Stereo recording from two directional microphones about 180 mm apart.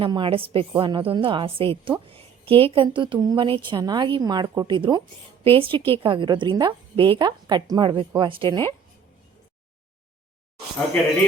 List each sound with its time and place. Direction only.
0.0 s a woman's voice: 30° right (ahead or behind)